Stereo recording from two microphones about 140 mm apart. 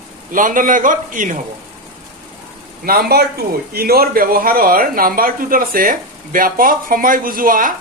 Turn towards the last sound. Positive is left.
turn(degrees=-80)